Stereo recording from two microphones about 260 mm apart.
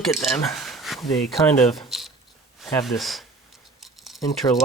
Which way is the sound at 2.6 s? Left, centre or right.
Centre.